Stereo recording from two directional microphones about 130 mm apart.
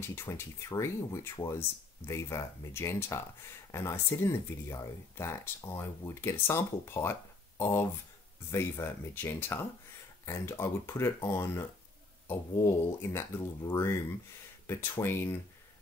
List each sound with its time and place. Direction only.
0.1 s speech: 20° left (ahead or behind)